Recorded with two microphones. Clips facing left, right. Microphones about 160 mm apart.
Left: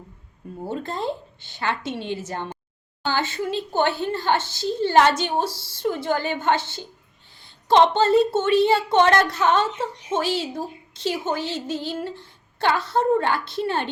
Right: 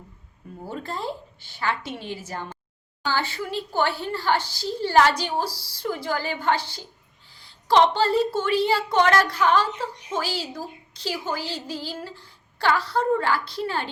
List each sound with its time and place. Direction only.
0.6 s a woman's voice: 25° left (ahead or behind)